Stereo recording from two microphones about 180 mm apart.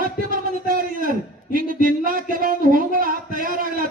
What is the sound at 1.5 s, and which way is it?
Speech, 50° right (ahead or behind).